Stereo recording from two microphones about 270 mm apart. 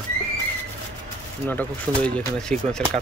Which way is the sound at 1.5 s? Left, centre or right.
Centre.